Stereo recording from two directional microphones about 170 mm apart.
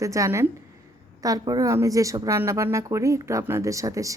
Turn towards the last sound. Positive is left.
turn(degrees=-20)  # may be behind; listen again after turning